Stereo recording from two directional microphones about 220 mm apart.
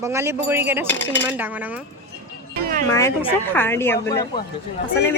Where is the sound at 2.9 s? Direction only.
15° left (ahead or behind).